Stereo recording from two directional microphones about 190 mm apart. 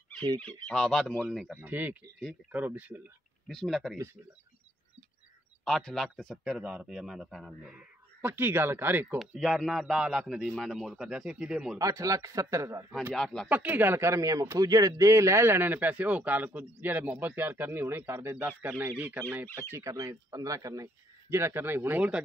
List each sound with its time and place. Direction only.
0.4 s a man's voice: 5° left (ahead or behind)
1.6 s a man's voice: 10° right (ahead or behind)
5.7 s a man's voice: 5° left (ahead or behind)
8.2 s a man's voice: 10° right (ahead or behind)
9.2 s a man's voice: centre (ahead or behind)
11.8 s a man's voice: 15° right (ahead or behind)
13.1 s a man's voice: centre (ahead or behind)
13.5 s a man's voice: 10° right (ahead or behind)